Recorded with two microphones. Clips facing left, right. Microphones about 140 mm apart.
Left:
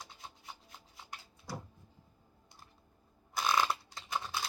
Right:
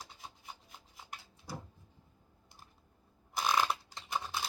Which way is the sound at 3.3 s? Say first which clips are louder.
Even; 5° right (ahead or behind).